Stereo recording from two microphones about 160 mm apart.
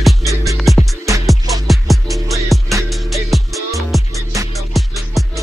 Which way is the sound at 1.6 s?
Centre (ahead or behind).